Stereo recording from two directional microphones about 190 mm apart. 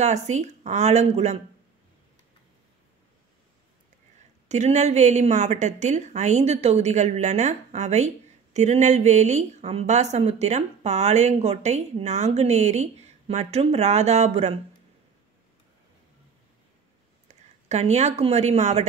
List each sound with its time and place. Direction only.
0.0 s a woman's voice: 35° right (ahead or behind)
4.5 s a woman's voice: 35° right (ahead or behind)
17.3 s speech: 35° right (ahead or behind)